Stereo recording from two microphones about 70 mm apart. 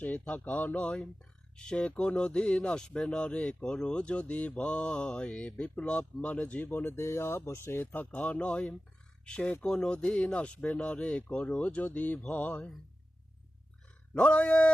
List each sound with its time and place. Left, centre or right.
0.0 s speech: left
8.1 s speech: centre
14.1 s speech: centre